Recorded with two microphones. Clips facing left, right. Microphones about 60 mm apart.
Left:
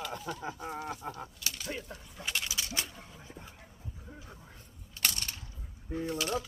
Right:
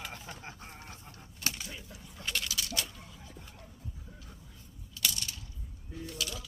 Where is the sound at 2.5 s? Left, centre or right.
Left.